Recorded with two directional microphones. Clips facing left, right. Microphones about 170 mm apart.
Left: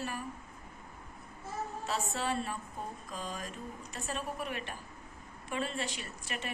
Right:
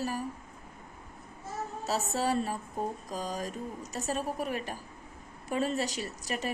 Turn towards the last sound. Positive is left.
turn(degrees=-40)  # may be behind; listen again after turning